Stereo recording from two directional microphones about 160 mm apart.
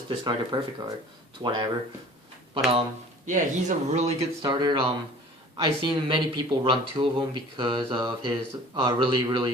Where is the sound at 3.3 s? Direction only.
50° right (ahead or behind).